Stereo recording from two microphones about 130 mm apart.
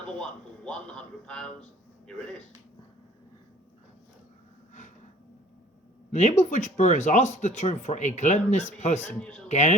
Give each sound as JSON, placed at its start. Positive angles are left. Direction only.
{"t": 0.1, "sound": "a man's voice", "side_deg": 5}
{"t": 6.1, "sound": "speech", "side_deg": 60}
{"t": 9.2, "sound": "speech", "side_deg": 10}
{"t": 9.5, "sound": "speech", "side_deg": 60}